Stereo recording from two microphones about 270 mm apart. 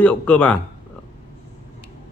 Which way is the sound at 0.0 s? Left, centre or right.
Centre.